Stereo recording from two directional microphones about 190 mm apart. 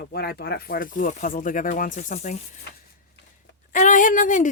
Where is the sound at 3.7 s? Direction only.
45° left (ahead or behind).